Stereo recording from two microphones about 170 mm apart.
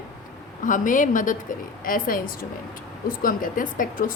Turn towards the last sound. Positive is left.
turn(degrees=55)  # may be behind; listen again after turning